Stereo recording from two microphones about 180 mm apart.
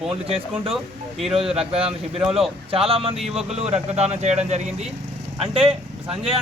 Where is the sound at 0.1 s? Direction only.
30° right (ahead or behind).